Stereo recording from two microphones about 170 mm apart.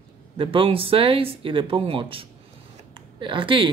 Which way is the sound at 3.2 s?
30° right (ahead or behind).